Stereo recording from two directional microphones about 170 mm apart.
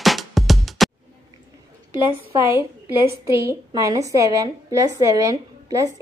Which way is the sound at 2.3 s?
15° right (ahead or behind).